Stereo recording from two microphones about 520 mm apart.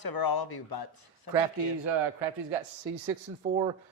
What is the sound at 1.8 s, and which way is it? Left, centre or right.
Speech, right.